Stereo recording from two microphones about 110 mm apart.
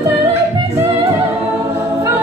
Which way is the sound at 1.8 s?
25° right (ahead or behind).